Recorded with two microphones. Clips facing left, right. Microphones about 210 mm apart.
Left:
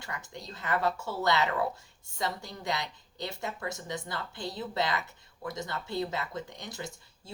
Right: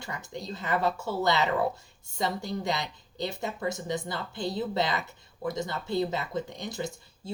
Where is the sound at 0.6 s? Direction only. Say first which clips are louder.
Right 2 dB; 20° right (ahead or behind).